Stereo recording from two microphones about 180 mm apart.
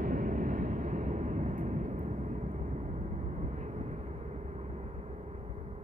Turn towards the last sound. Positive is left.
turn(degrees=-40)  # may be behind; listen again after turning